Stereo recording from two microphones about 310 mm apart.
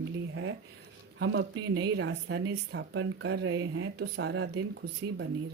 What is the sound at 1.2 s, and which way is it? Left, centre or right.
Speech, right.